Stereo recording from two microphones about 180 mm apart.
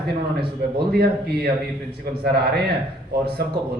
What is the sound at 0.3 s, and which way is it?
Speech, 60° right (ahead or behind).